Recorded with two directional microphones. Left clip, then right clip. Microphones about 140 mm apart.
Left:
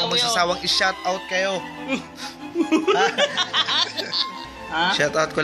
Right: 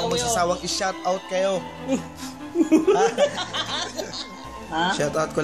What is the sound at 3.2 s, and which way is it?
Snicker, 40° right (ahead or behind).